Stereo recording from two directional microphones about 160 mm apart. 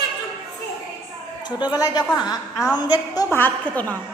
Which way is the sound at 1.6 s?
25° left (ahead or behind).